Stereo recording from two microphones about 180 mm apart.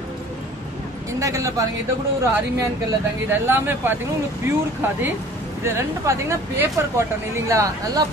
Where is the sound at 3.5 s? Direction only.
10° right (ahead or behind).